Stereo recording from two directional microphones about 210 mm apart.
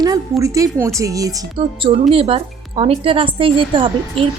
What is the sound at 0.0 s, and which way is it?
Speech, 15° right (ahead or behind).